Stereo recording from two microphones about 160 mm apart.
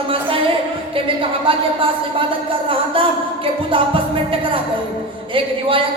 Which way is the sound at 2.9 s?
35° right (ahead or behind).